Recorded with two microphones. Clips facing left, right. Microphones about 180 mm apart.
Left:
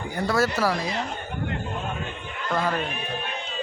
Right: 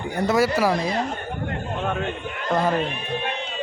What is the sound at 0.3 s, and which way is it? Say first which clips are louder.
Speech: right 3 dB; 10° right (ahead or behind).